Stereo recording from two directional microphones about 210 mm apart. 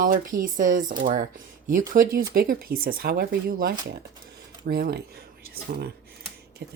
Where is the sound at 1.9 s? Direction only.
40° right (ahead or behind).